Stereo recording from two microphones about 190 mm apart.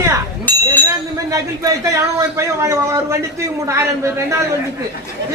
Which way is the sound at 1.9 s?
15° right (ahead or behind).